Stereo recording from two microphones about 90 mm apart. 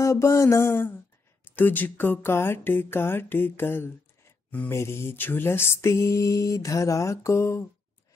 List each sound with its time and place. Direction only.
0.0 s mantra: 35° left (ahead or behind)
1.4 s speech: 20° left (ahead or behind)
4.5 s mantra: 15° left (ahead or behind)
4.7 s mantra: 30° left (ahead or behind)